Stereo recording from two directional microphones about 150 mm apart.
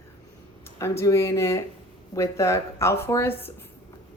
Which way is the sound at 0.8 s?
20° left (ahead or behind).